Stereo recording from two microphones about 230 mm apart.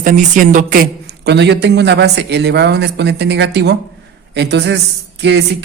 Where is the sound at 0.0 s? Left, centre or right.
Right.